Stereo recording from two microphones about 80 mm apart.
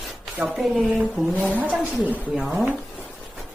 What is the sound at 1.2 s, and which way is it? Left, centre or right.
Speech, centre.